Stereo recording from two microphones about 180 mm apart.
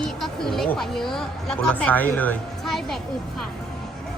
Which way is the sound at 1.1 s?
5° left (ahead or behind).